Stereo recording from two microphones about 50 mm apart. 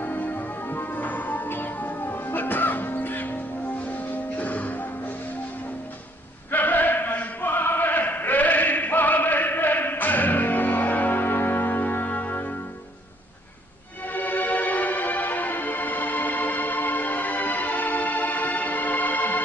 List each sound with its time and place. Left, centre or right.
0.0 s music: left
6.5 s chant: left
14.1 s music: left